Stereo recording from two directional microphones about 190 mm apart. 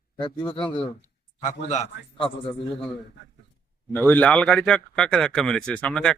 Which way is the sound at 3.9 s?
10° left (ahead or behind).